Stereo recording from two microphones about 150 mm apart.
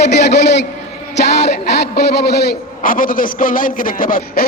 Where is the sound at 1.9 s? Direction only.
90° left.